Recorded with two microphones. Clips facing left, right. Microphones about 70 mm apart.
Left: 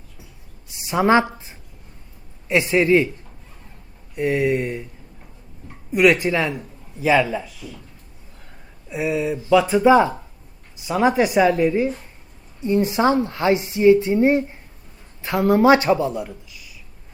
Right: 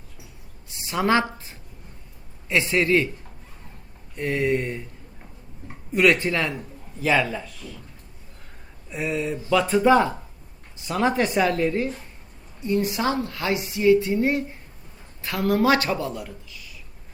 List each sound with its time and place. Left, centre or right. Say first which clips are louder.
0.8 s a woman's voice: left 5 dB; centre
4.1 s speech: left 4 dB; centre
5.9 s a man's voice: left 3 dB; centre
8.9 s speech: left 4 dB; centre
12.5 s a woman's voice: left 5 dB; left